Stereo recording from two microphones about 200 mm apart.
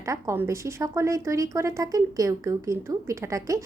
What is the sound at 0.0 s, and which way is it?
Speech, 15° right (ahead or behind).